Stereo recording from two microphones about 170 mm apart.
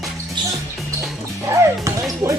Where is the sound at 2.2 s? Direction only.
20° right (ahead or behind).